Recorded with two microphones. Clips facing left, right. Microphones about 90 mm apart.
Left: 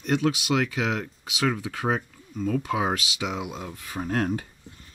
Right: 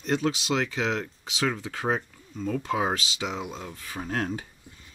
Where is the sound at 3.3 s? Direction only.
10° left (ahead or behind).